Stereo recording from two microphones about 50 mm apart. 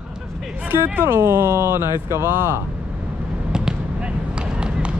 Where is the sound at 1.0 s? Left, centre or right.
Right.